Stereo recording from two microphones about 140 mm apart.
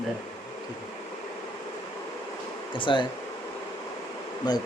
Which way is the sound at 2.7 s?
35° left (ahead or behind).